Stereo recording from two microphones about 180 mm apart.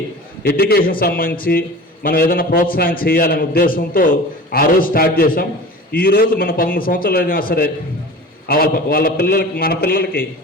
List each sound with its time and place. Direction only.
0.4 s a man's voice: 60° left (ahead or behind)